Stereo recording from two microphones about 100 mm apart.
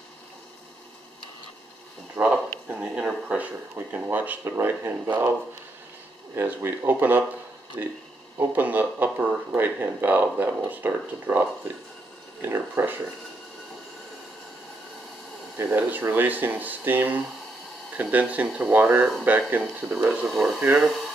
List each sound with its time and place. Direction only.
2.1 s speech: 15° right (ahead or behind)
6.3 s speech: 25° right (ahead or behind)
15.5 s speech: 20° right (ahead or behind); by 20.5 s 5° right (ahead or behind)